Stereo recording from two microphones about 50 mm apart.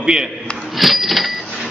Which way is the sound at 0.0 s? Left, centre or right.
Centre.